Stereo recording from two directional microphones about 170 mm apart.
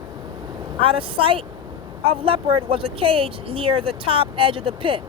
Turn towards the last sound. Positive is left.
turn(degrees=-30)  # may be behind; listen again after turning